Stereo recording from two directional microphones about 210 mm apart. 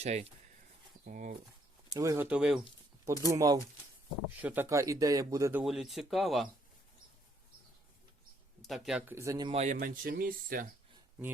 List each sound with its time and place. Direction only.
0.0 s speech: 35° right (ahead or behind)
1.9 s speech: 15° right (ahead or behind)
2.2 s speech: 5° right (ahead or behind)
3.0 s speech: 15° right (ahead or behind)
8.6 s speech: centre (ahead or behind)
9.5 s speech: 30° right (ahead or behind)
9.7 s speech: 40° right (ahead or behind)